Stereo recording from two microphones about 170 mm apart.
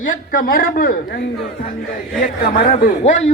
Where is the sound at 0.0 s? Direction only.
55° left (ahead or behind).